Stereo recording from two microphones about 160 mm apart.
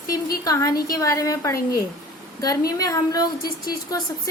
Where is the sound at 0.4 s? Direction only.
20° left (ahead or behind).